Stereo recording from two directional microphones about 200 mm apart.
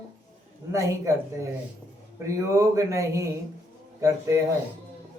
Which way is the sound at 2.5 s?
15° right (ahead or behind).